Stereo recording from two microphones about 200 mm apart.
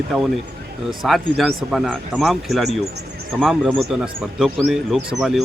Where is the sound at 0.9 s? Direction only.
Centre (ahead or behind).